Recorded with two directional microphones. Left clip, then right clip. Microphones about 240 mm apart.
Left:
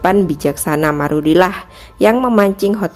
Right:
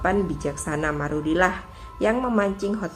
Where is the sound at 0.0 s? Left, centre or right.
Left.